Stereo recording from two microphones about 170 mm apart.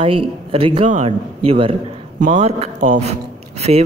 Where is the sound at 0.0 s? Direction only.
35° right (ahead or behind).